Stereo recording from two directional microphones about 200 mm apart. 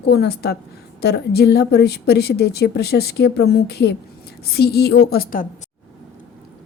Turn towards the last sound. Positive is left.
turn(degrees=45)  # may be behind; listen again after turning